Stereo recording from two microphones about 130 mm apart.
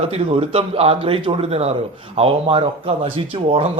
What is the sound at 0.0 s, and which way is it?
Speech, 50° right (ahead or behind).